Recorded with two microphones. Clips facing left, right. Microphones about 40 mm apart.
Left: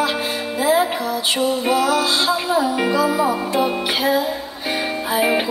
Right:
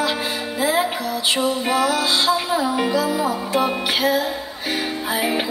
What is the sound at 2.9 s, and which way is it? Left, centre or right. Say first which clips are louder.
Music: left 3 dB; centre.